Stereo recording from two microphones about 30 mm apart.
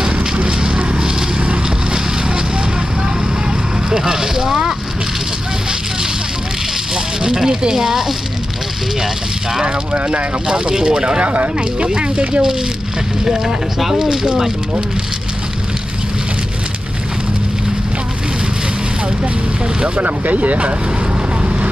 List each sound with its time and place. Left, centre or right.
0.5 s a sound: right
3.9 s fire: centre
7.2 s speech: right
9.9 s speech: right
10.6 s speech: right
11.2 s speech: right
11.8 s speech: right
20.0 s speech: right